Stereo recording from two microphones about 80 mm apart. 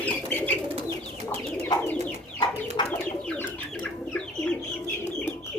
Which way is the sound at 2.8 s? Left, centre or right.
Left.